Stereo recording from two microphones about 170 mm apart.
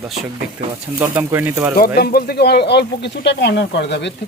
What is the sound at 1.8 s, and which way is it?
Speech, 65° left (ahead or behind).